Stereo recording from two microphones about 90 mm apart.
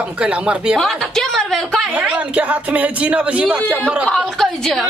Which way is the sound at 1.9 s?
15° right (ahead or behind).